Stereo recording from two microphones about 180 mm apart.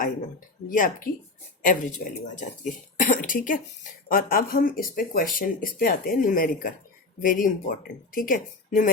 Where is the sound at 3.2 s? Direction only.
45° left (ahead or behind).